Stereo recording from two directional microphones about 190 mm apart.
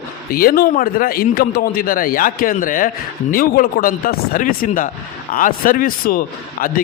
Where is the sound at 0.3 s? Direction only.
50° left (ahead or behind).